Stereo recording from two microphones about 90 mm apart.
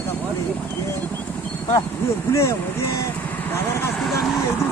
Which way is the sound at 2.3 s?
30° left (ahead or behind).